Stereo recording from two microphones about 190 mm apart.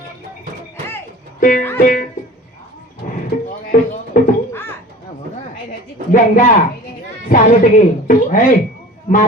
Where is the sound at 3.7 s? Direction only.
45° left (ahead or behind).